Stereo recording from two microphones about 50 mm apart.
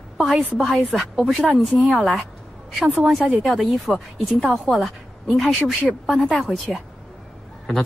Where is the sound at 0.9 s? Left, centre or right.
Centre.